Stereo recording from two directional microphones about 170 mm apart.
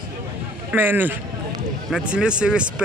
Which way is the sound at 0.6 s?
10° right (ahead or behind).